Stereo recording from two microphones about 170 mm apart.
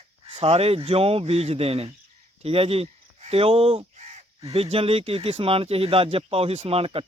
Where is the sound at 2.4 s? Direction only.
35° right (ahead or behind).